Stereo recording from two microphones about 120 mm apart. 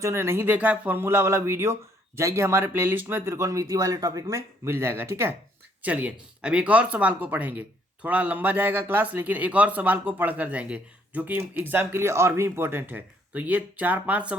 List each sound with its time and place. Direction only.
0.0 s speech: 20° right (ahead or behind)